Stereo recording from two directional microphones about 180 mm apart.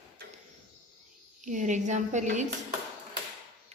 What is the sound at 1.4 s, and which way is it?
A woman's voice, 45° right (ahead or behind).